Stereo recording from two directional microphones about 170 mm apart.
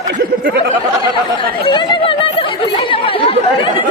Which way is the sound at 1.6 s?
30° left (ahead or behind).